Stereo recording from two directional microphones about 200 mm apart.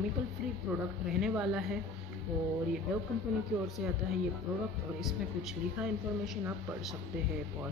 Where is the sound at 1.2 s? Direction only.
5° right (ahead or behind).